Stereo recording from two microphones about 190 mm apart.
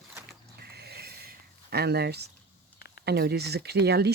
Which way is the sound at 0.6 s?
55° right (ahead or behind).